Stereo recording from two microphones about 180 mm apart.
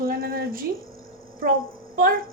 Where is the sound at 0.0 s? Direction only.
55° right (ahead or behind).